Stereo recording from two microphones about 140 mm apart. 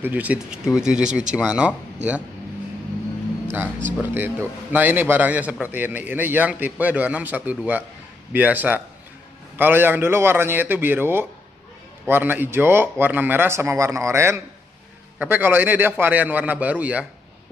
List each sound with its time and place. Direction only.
0.0 s a man's voice: 10° right (ahead or behind)
4.0 s a man's voice: 15° right (ahead or behind)